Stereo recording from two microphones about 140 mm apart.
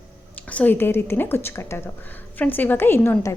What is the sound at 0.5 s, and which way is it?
A woman's voice, 10° left (ahead or behind).